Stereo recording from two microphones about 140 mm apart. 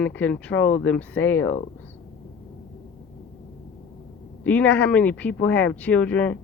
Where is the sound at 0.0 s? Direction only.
10° left (ahead or behind).